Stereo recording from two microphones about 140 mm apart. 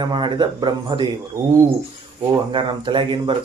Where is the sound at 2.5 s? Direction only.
35° right (ahead or behind).